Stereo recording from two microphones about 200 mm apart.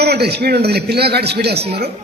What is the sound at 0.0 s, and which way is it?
A man's voice, 55° right (ahead or behind).